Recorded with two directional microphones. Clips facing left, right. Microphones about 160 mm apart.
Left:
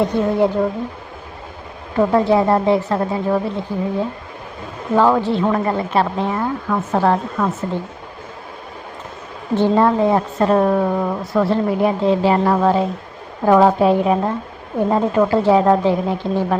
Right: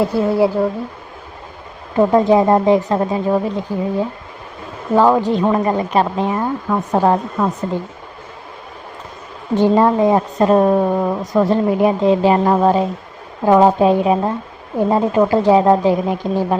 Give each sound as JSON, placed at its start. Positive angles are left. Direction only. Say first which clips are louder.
{"t": 0.0, "sound": "speech", "louder": "right 1 dB", "side_deg": -5}
{"t": 2.0, "sound": "a woman's voice", "louder": "right 2 dB", "side_deg": -15}
{"t": 4.9, "sound": "a woman's voice", "louder": "right 2 dB", "side_deg": -15}
{"t": 9.6, "sound": "a woman's voice", "louder": "right 2 dB", "side_deg": -15}